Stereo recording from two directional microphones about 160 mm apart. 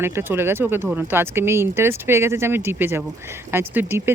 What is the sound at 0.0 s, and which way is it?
Speech, 15° right (ahead or behind).